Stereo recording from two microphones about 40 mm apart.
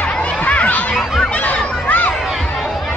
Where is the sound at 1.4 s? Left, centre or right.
Left.